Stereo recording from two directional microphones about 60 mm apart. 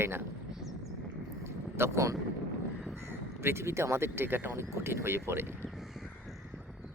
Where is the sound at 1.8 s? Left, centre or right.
Right.